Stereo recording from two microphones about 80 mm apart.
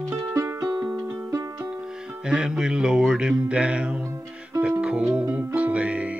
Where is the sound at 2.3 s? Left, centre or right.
Centre.